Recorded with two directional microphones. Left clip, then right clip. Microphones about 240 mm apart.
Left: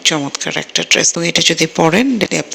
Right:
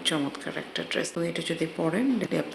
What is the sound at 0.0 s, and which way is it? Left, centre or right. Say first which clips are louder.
Speech: left 13 dB; left.